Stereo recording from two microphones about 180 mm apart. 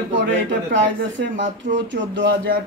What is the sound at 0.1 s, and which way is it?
Speech, 90° right.